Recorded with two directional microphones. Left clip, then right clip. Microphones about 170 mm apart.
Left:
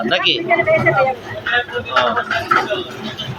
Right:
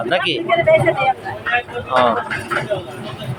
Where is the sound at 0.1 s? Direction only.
25° right (ahead or behind).